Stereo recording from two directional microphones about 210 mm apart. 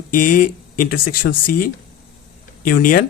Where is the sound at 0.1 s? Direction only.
40° left (ahead or behind).